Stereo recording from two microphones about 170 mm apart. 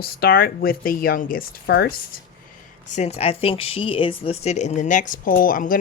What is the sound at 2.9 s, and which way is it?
Speech, 40° left (ahead or behind).